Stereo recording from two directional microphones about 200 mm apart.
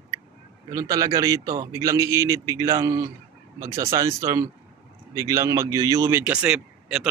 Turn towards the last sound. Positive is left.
turn(degrees=-5)  # may be behind; listen again after turning